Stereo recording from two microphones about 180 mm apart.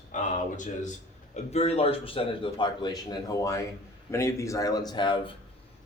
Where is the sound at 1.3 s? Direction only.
35° left (ahead or behind).